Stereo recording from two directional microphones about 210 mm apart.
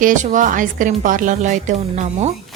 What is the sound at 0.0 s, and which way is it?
A woman's voice, 35° right (ahead or behind).